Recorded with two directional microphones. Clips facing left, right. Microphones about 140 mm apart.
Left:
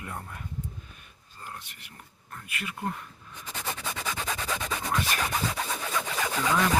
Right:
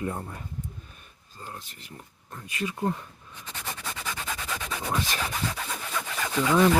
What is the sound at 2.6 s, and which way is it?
Speech, 30° right (ahead or behind).